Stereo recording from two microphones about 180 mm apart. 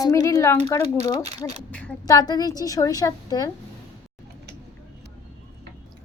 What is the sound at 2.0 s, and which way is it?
A child's voice, 20° left (ahead or behind).